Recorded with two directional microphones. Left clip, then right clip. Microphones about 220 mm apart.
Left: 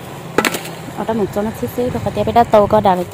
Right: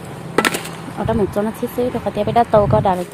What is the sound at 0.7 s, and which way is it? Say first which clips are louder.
Whip: left 1 dB; 50° left (ahead or behind).